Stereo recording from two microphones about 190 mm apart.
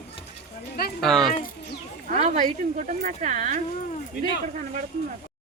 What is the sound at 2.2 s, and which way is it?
Speech, 40° right (ahead or behind).